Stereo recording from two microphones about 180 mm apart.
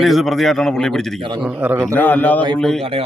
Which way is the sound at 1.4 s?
10° right (ahead or behind).